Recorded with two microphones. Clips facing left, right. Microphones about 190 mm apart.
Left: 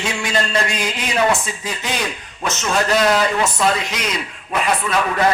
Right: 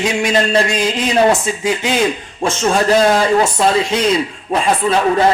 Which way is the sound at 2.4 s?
30° right (ahead or behind).